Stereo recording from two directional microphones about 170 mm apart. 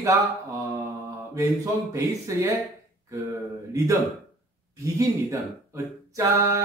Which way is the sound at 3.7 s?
15° right (ahead or behind).